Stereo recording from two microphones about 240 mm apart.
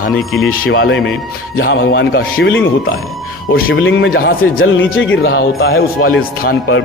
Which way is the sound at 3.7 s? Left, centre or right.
Left.